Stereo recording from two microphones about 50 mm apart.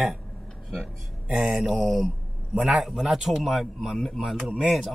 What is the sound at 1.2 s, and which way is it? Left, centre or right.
Speech, centre.